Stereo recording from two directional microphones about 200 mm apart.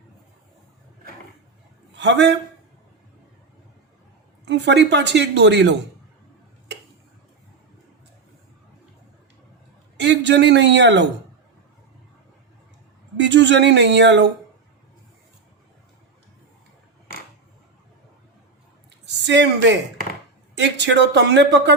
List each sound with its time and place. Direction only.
2.0 s a woman's voice: 60° right (ahead or behind)
4.4 s a woman's voice: 60° right (ahead or behind)
10.0 s a man's voice: 60° right (ahead or behind)
13.1 s a woman's voice: 60° right (ahead or behind)
19.0 s a woman's voice: 60° right (ahead or behind)